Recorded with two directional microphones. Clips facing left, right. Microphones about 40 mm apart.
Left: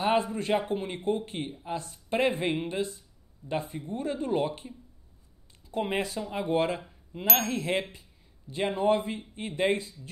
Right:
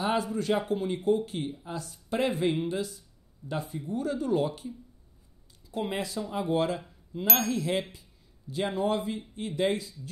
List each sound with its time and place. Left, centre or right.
0.0 s speech: left